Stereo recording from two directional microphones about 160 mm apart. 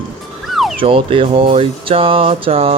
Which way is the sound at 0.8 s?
35° right (ahead or behind).